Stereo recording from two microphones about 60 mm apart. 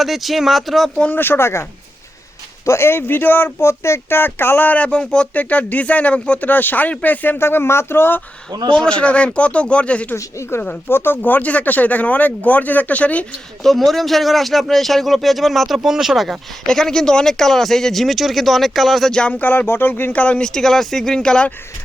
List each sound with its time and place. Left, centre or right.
0.0 s speech: centre
1.1 s speech: left
2.6 s speech: left
3.6 s speech: left
7.3 s speech: left
8.7 s speech: centre
10.8 s speech: left
13.6 s speech: centre
16.6 s speech: centre
19.3 s speech: left
20.2 s speech: centre